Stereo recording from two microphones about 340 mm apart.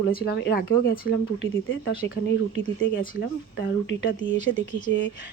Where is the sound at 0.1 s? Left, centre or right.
Left.